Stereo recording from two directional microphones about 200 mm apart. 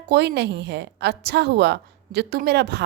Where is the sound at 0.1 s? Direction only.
55° right (ahead or behind).